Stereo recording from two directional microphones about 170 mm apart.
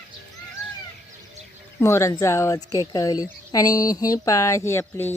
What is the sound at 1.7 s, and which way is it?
Speech, 15° left (ahead or behind).